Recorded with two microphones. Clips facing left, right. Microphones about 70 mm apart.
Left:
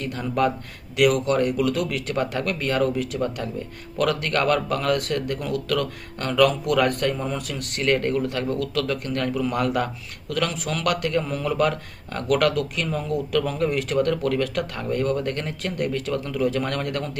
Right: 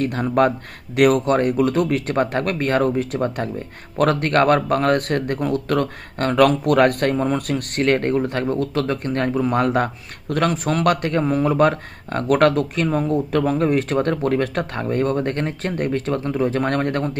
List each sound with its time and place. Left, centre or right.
0.0 s speech: right